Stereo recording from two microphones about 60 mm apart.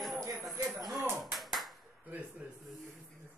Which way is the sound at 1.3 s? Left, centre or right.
Centre.